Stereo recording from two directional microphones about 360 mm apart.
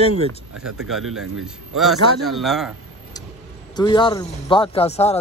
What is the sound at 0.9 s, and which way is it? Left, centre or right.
Speech, centre.